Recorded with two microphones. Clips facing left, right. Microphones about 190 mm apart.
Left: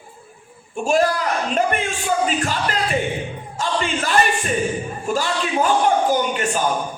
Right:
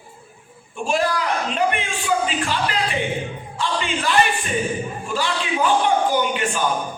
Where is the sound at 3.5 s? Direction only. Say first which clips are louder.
Left 2 dB; 45° left (ahead or behind).